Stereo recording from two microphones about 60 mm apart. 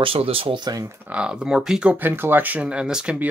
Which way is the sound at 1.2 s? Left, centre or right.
Centre.